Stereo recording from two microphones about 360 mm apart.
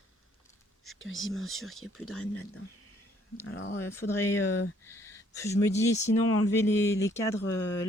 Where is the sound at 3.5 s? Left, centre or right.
Left.